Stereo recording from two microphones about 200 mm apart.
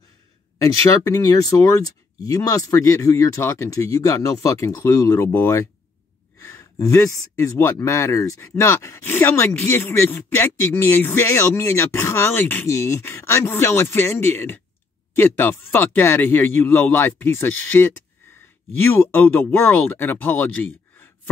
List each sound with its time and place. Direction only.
0.8 s speech: 15° left (ahead or behind)